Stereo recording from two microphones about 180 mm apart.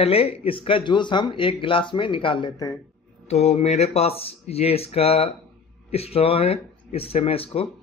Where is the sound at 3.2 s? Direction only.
35° left (ahead or behind).